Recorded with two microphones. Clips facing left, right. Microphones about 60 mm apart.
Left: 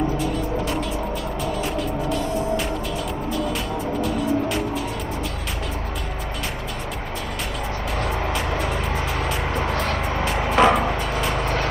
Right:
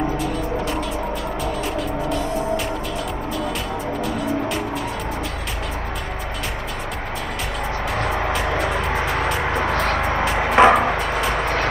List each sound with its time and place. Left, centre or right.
0.2 s music: centre
4.0 s music: centre
8.5 s music: centre
9.4 s vehicle: right
10.6 s music: right
11.0 s music: centre